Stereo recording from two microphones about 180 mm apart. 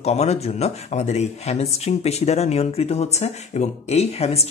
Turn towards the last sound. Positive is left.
turn(degrees=35)  # may be behind; listen again after turning